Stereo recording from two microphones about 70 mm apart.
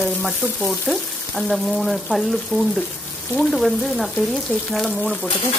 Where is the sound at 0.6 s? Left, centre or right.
Centre.